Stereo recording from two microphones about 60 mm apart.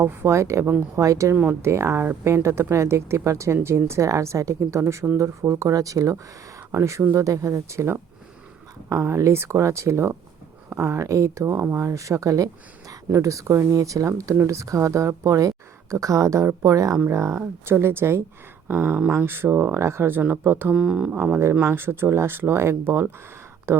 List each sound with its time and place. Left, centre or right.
0.0 s speech: right
0.3 s speech: right
0.9 s speech: right
1.6 s speech: right
6.7 s speech: right
7.2 s speech: right
17.4 s speech: right
19.8 s speech: right
20.7 s speech: centre
21.1 s speech: right